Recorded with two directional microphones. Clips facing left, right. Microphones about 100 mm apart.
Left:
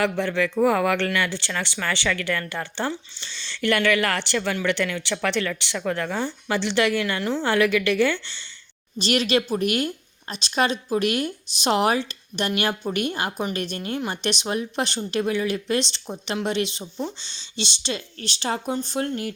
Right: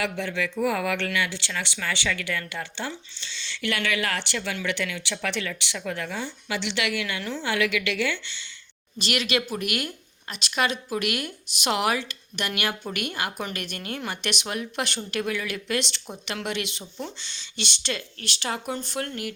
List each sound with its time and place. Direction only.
0.0 s a woman's voice: 55° left (ahead or behind); by 19.3 s 25° left (ahead or behind)